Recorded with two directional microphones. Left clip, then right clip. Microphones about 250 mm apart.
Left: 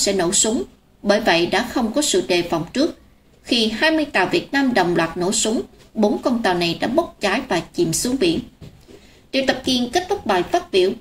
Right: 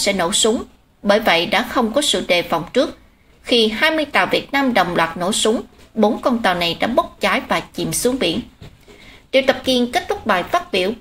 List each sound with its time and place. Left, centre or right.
0.0 s a woman's voice: centre